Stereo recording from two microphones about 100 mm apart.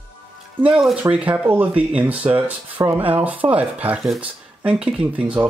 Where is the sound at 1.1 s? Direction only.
15° right (ahead or behind).